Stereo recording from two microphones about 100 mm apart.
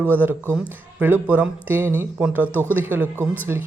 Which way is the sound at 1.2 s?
15° right (ahead or behind).